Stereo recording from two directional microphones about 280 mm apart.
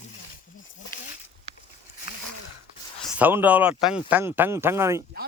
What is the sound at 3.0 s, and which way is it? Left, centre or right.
Speech, centre.